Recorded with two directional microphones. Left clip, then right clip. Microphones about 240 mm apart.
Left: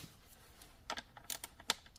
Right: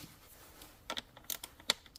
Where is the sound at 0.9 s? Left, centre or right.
Centre.